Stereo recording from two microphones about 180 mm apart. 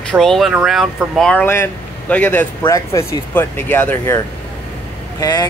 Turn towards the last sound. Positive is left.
turn(degrees=20)  # may be behind; listen again after turning